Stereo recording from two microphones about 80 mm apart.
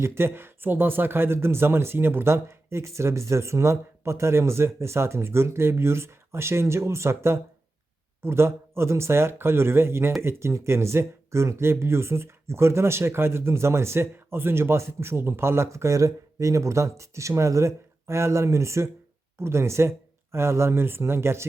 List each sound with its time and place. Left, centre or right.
0.0 s speech: right